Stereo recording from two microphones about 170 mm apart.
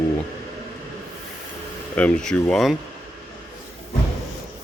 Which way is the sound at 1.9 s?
5° left (ahead or behind).